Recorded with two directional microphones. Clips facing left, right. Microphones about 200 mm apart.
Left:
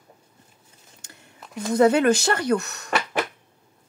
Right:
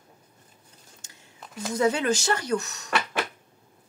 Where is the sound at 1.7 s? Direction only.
60° left (ahead or behind).